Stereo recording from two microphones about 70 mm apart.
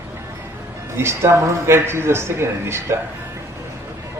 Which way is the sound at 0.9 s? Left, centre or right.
Right.